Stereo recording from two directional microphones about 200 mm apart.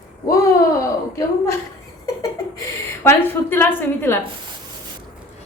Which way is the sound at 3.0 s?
10° left (ahead or behind).